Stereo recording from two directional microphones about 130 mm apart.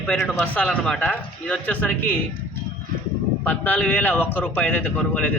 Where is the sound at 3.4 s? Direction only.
15° left (ahead or behind).